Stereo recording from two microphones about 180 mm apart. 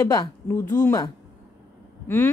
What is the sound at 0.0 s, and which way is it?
A woman's voice, 15° left (ahead or behind).